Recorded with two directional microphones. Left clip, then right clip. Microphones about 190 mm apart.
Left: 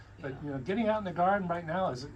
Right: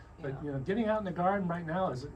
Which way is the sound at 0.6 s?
30° left (ahead or behind).